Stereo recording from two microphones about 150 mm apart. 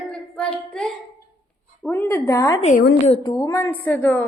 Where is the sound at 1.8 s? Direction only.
15° left (ahead or behind).